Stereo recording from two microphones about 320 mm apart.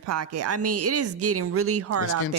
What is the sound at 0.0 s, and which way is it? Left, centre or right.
Speech, right.